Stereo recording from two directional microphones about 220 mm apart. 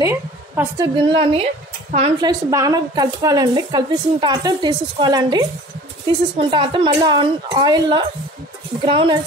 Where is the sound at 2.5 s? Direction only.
15° right (ahead or behind).